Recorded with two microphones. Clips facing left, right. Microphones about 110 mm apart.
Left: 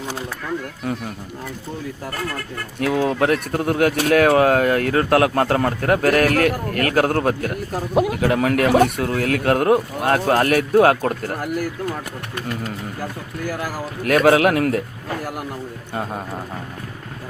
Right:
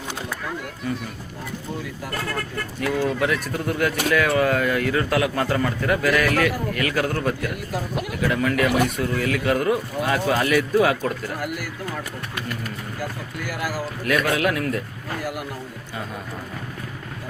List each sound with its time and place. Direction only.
2.9 s speech: 65° left (ahead or behind)
14.3 s a man's voice: 65° left (ahead or behind)